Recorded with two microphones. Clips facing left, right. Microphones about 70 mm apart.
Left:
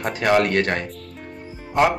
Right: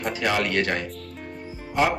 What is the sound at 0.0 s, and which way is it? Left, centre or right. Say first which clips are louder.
A man's voice: left 6 dB; left.